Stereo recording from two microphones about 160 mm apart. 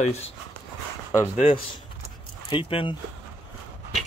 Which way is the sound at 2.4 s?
35° left (ahead or behind).